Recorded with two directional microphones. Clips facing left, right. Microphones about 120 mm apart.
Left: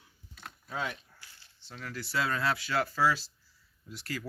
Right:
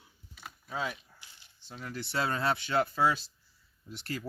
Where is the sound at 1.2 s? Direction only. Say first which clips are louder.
Even; 20° right (ahead or behind).